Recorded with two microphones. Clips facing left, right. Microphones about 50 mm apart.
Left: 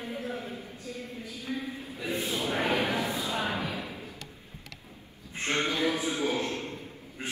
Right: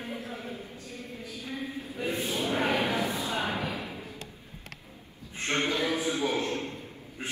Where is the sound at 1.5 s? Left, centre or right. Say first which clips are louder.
Right 3 dB; right.